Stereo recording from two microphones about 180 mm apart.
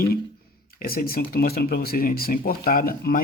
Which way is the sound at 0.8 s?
55° left (ahead or behind).